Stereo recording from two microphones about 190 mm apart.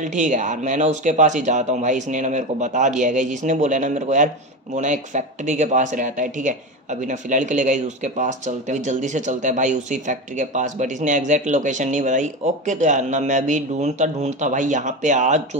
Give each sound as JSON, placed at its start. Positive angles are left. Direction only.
{"t": 0.0, "sound": "speech", "side_deg": -40}